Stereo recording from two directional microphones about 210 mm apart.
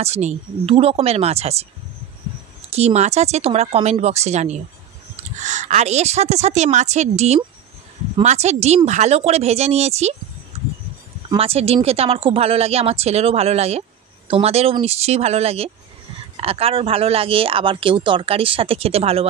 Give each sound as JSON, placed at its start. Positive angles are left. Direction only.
{"t": 0.0, "sound": "speech", "side_deg": -30}
{"t": 2.7, "sound": "speech", "side_deg": -30}
{"t": 11.2, "sound": "speech", "side_deg": -25}